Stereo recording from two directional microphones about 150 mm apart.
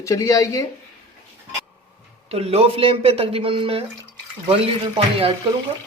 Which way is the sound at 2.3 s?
45° right (ahead or behind).